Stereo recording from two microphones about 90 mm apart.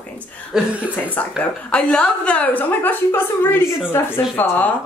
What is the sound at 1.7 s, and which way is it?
A woman's voice, 15° left (ahead or behind).